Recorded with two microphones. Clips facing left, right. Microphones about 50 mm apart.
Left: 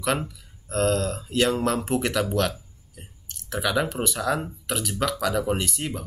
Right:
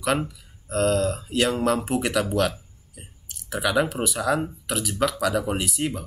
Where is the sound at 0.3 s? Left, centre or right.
Centre.